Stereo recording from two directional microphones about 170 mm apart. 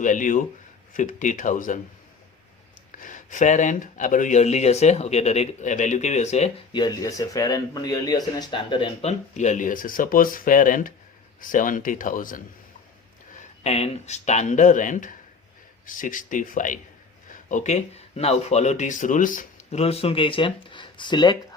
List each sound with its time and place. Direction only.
0.0 s speech: 50° left (ahead or behind)
3.0 s speech: 50° left (ahead or behind)
6.7 s speech: 20° left (ahead or behind); by 12.4 s 55° left (ahead or behind)
13.3 s speech: 40° left (ahead or behind)